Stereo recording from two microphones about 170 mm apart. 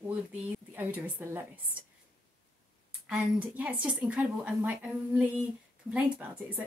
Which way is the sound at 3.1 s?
5° right (ahead or behind).